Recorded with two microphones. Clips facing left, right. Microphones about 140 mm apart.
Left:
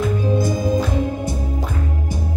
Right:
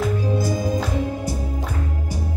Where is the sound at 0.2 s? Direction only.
20° left (ahead or behind).